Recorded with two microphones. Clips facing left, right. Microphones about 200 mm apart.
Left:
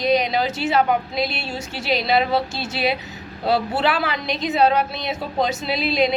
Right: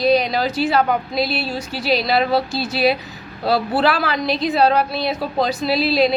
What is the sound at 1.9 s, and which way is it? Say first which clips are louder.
A woman's voice: right 2 dB; 20° left (ahead or behind).